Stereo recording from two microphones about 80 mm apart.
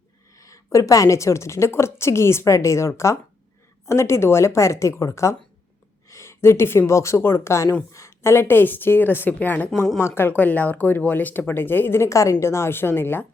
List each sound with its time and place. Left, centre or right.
0.3 s a woman's voice: left